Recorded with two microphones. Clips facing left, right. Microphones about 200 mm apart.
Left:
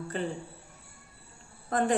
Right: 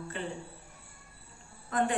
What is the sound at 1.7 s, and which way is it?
Speech, 40° left (ahead or behind).